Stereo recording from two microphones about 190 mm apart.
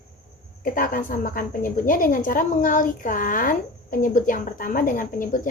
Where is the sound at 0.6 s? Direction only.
45° left (ahead or behind).